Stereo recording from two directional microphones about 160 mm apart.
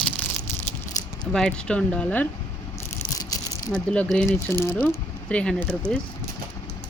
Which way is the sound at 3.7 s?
5° left (ahead or behind).